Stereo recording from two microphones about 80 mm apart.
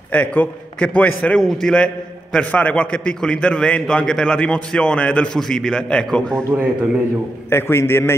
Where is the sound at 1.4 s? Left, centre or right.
Centre.